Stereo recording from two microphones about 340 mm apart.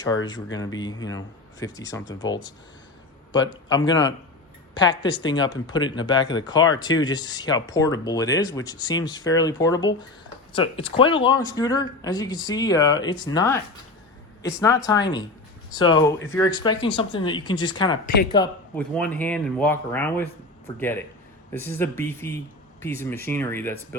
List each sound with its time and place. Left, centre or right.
0.5 s speech: centre
3.7 s speech: centre
14.8 s speech: centre
18.0 s speech: left
18.3 s speech: centre